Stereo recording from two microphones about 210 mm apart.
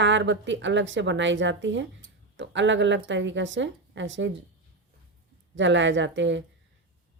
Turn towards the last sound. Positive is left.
turn(degrees=-60)  # may be behind; listen again after turning